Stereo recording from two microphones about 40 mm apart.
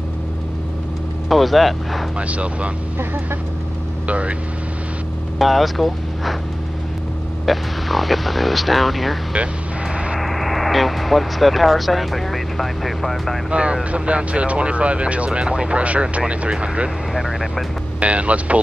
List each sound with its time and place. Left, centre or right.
1.3 s speech: centre
2.1 s speech: right
4.1 s speech: right
5.4 s speech: centre
7.4 s speech: centre
13.5 s speech: right
17.1 s speech: centre
18.0 s speech: right